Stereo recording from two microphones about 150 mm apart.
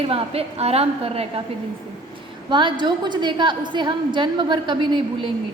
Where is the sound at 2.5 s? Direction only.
30° right (ahead or behind).